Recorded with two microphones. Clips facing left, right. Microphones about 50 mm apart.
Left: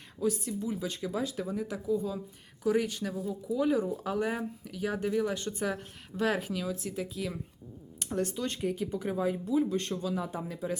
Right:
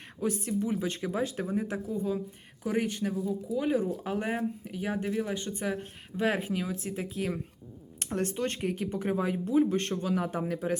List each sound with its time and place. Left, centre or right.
0.2 s speech: right